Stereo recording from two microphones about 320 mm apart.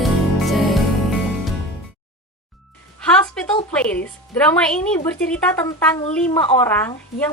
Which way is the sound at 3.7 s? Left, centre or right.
Centre.